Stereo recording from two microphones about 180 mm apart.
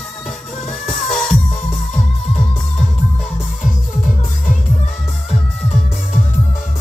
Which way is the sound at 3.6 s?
45° left (ahead or behind).